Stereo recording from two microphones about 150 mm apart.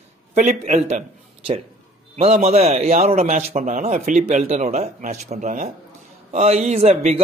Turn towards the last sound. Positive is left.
turn(degrees=-45)  # may be behind; listen again after turning